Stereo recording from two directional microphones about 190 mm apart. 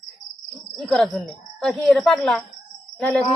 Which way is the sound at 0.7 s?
Centre (ahead or behind).